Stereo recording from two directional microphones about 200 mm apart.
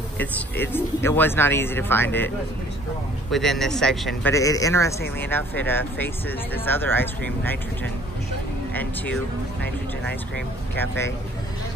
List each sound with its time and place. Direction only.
0.2 s speech: 10° left (ahead or behind)
3.3 s speech: centre (ahead or behind)
4.2 s speech: 15° left (ahead or behind)
8.7 s speech: 10° left (ahead or behind)